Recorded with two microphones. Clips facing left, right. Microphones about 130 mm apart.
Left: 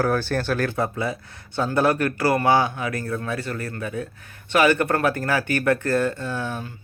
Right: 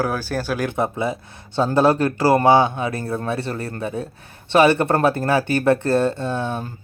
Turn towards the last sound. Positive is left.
turn(degrees=-25)  # may be behind; listen again after turning